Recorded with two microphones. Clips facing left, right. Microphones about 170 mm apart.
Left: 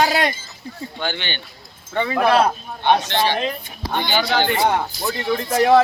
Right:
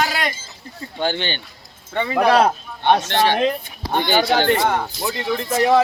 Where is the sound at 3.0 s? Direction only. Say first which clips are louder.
Right 3 dB; 55° right (ahead or behind).